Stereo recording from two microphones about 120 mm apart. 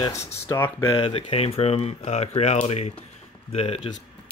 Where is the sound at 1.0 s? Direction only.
50° left (ahead or behind).